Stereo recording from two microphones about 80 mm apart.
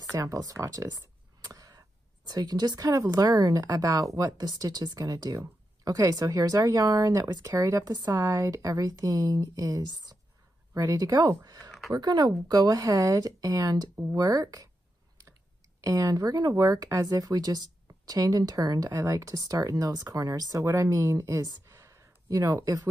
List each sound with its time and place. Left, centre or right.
0.1 s speech: right
10.7 s speech: right
15.8 s speech: right
21.6 s a sound: right
22.6 s speech: right